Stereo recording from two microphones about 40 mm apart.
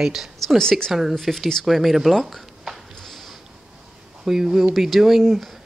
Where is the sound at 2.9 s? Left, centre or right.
Centre.